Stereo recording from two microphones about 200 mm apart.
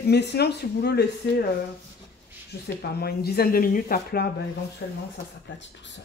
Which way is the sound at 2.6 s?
50° left (ahead or behind).